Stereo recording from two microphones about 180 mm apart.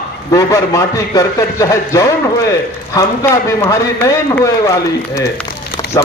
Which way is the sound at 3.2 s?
15° left (ahead or behind).